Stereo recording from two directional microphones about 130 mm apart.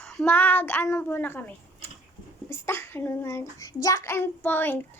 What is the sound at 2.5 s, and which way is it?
Child singing, 20° left (ahead or behind).